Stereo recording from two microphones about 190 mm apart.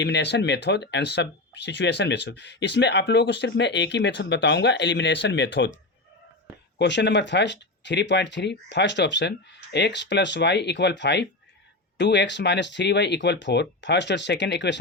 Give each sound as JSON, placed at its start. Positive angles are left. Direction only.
{"t": 0.0, "sound": "speech", "side_deg": 65}
{"t": 6.7, "sound": "speech", "side_deg": 65}